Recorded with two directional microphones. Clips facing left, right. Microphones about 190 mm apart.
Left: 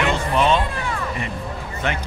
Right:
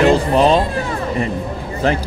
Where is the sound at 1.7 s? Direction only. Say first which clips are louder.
Right 8 dB; 35° right (ahead or behind).